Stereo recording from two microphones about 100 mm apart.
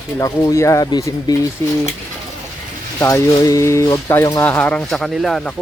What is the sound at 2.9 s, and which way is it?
Speech, 30° left (ahead or behind).